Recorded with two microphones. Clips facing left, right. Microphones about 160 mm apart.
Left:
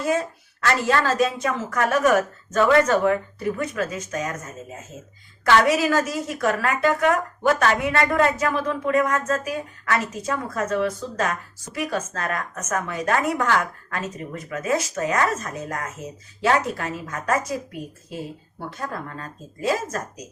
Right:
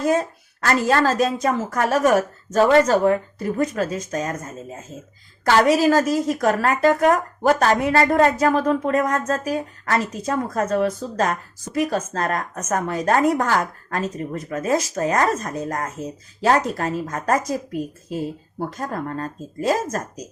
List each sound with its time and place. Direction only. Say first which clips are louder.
0.0 s a woman's voice: right 3 dB; 40° right (ahead or behind)
5.5 s a woman's voice: right 3 dB; 40° right (ahead or behind)